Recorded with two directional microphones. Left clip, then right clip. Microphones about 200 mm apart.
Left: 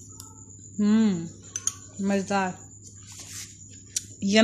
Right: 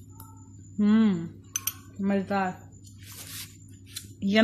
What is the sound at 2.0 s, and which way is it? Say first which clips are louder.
Speech: left 2 dB; 10° left (ahead or behind).